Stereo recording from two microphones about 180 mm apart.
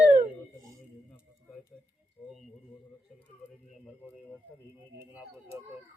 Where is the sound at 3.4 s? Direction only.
5° left (ahead or behind).